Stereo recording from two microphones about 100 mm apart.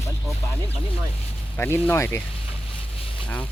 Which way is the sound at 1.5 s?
20° left (ahead or behind).